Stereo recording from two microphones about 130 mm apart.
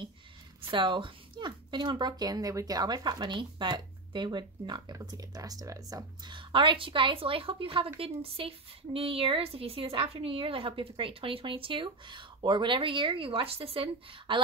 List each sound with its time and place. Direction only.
0.6 s speech: 40° right (ahead or behind)